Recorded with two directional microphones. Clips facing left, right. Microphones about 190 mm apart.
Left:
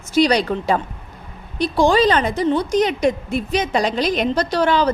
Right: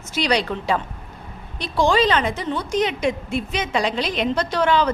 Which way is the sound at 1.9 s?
40° left (ahead or behind).